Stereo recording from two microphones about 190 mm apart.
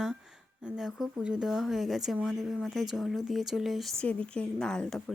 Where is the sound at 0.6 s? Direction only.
Centre (ahead or behind).